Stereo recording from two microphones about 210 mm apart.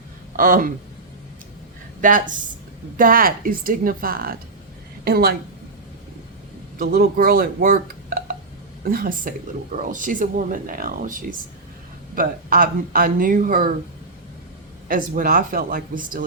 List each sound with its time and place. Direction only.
0.3 s speech: 40° right (ahead or behind)
2.0 s a woman's voice: 40° right (ahead or behind)
6.7 s a woman's voice: 45° right (ahead or behind)
14.8 s speech: 40° right (ahead or behind)